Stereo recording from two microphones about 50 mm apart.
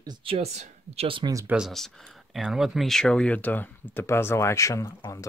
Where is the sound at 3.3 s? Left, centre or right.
Left.